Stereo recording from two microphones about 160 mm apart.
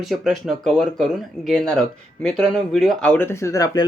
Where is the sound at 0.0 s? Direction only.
Centre (ahead or behind).